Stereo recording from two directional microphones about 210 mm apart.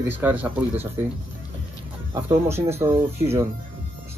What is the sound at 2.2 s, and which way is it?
Speech, 10° right (ahead or behind).